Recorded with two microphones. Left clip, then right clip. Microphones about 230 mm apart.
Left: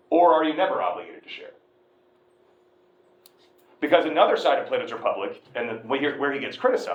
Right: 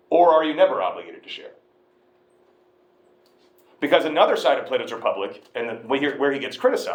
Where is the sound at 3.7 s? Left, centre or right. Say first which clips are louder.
Right 1 dB; right.